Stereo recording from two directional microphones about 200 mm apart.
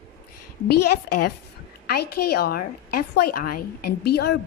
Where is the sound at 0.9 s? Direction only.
50° left (ahead or behind).